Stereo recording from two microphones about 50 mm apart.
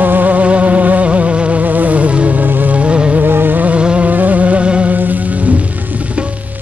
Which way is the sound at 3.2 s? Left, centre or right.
Right.